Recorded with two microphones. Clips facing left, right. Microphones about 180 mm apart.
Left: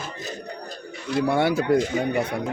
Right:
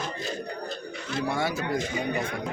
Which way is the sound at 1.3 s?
65° left (ahead or behind).